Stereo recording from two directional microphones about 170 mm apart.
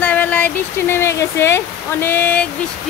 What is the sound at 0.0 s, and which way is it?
Speech, 10° left (ahead or behind).